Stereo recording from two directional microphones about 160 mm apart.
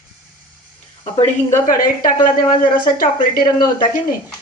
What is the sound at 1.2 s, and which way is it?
Speech, 50° left (ahead or behind).